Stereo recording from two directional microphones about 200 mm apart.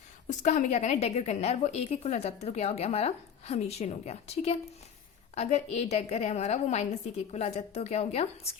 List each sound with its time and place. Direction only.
0.3 s a woman's voice: 35° left (ahead or behind)